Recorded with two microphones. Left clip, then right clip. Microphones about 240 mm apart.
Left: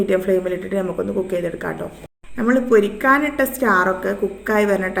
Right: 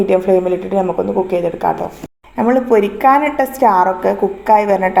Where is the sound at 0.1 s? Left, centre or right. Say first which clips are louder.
Right 5 dB; right.